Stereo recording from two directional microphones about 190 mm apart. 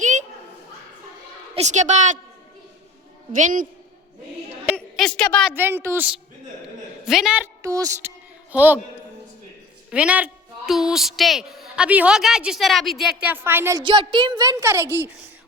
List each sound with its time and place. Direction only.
0.0 s a sound: 40° right (ahead or behind)
1.5 s a woman's voice: 40° right (ahead or behind)
3.3 s a woman's voice: 45° right (ahead or behind)
4.6 s a sound: centre (ahead or behind)
5.5 s a woman's voice: 10° right (ahead or behind)
7.0 s a woman's voice: centre (ahead or behind)
7.6 s a woman's voice: 20° right (ahead or behind)
9.9 s a woman's voice: 5° right (ahead or behind)
13.8 s a woman's voice: 25° right (ahead or behind)